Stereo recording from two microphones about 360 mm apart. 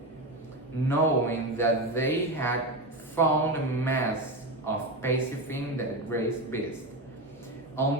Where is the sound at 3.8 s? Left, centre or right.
Centre.